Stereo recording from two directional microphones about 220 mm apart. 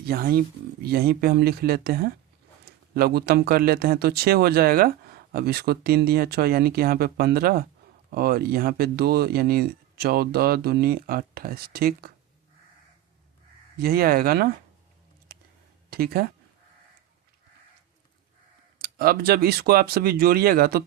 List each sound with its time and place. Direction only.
0.0 s speech: 45° right (ahead or behind)
13.7 s speech: 40° right (ahead or behind)
15.3 s a sound: 45° right (ahead or behind)
15.9 s speech: 45° right (ahead or behind)
18.8 s speech: 45° right (ahead or behind)